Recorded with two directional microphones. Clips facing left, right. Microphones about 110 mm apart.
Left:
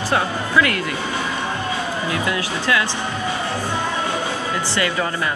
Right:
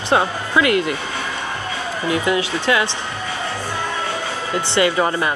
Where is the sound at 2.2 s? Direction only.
25° right (ahead or behind).